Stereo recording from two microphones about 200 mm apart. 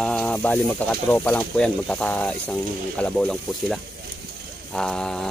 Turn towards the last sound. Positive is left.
turn(degrees=5)  # may be behind; listen again after turning